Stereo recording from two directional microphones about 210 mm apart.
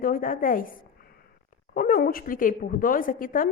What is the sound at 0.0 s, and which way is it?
Speech, 40° left (ahead or behind).